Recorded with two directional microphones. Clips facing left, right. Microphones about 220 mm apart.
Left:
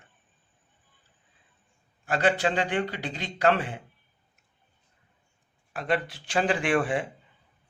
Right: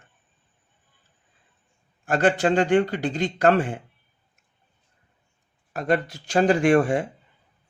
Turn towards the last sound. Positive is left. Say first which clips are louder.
# right 7 dB
turn(degrees=-45)  # may be behind; listen again after turning